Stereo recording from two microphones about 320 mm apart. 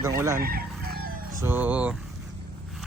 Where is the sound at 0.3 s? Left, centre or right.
Right.